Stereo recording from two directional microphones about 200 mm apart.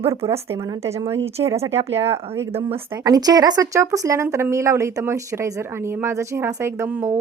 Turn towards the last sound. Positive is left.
turn(degrees=-10)  # may be behind; listen again after turning